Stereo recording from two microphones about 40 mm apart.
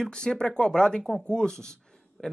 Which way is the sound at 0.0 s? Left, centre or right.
Left.